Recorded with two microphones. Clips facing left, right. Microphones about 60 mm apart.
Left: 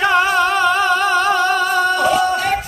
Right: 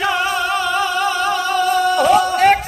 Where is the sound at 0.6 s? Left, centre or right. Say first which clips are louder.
Left 3 dB; left.